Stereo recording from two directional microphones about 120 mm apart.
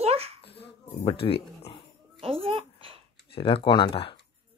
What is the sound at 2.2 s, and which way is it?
Babbling, 55° right (ahead or behind).